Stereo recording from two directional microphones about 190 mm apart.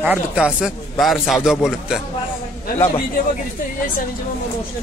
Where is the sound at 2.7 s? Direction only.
25° left (ahead or behind).